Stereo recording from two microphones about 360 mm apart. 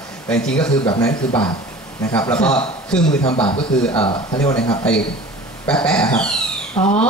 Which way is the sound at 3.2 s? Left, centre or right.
Centre.